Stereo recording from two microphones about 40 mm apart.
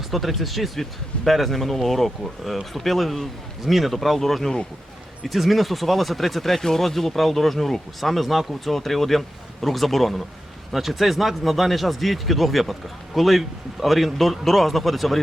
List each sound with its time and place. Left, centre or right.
0.1 s speech: centre